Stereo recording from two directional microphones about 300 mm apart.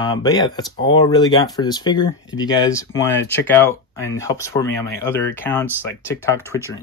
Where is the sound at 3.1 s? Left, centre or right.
Left.